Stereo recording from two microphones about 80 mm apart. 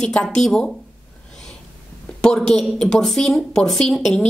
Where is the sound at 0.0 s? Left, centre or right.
Centre.